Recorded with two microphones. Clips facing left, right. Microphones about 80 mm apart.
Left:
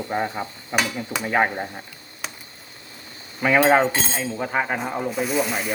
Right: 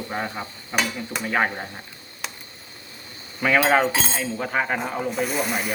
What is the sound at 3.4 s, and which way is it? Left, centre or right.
Speech, centre.